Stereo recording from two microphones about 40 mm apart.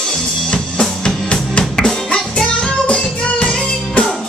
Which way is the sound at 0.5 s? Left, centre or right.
Left.